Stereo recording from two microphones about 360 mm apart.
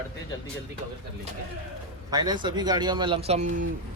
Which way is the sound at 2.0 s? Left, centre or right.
Centre.